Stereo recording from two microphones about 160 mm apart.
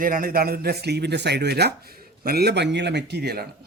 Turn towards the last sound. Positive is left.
turn(degrees=-85)